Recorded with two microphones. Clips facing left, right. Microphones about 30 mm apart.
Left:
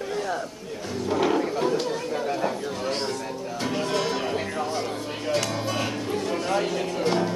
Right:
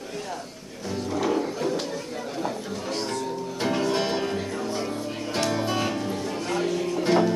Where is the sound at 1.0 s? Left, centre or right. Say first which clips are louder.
Left 3 dB; left.